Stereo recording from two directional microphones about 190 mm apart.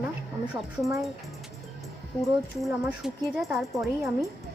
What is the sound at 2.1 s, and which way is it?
Speech, centre (ahead or behind).